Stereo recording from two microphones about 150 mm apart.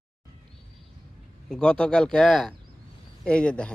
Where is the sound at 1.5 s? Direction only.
5° left (ahead or behind).